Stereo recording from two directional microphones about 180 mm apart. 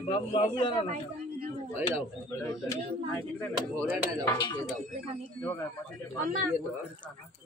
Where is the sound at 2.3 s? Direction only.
15° left (ahead or behind).